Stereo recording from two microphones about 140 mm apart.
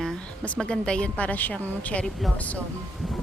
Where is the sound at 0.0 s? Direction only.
5° left (ahead or behind).